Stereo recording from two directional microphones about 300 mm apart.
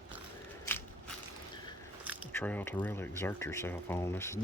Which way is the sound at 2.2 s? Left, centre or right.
Centre.